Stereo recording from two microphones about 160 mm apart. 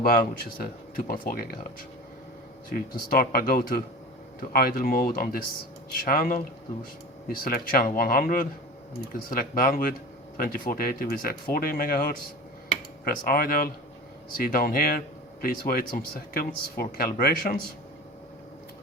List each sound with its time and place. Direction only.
0.0 s speech: 70° left (ahead or behind)
2.6 s speech: 65° left (ahead or behind)